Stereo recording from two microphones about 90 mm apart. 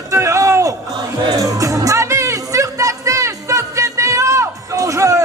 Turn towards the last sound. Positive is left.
turn(degrees=-35)  # may be behind; listen again after turning